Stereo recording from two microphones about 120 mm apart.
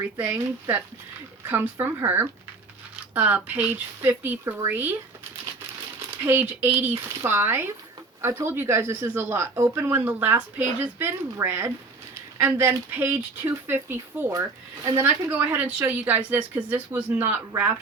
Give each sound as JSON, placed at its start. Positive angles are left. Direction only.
{"t": 0.0, "sound": "speech", "side_deg": -15}
{"t": 2.9, "sound": "speech", "side_deg": -15}
{"t": 6.1, "sound": "speech", "side_deg": -15}